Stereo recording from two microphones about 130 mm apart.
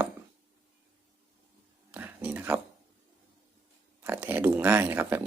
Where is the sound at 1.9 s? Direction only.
10° right (ahead or behind).